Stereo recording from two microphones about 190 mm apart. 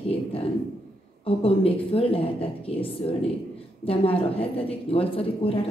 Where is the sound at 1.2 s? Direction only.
30° left (ahead or behind).